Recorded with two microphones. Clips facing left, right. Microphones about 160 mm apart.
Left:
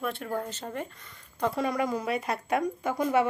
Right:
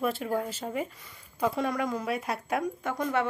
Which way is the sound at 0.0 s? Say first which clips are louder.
Right 3 dB; 5° right (ahead or behind).